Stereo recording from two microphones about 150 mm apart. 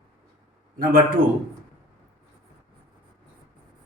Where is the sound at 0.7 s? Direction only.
75° right (ahead or behind).